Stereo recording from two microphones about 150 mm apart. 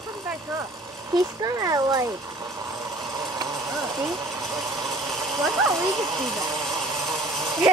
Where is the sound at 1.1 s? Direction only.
25° right (ahead or behind).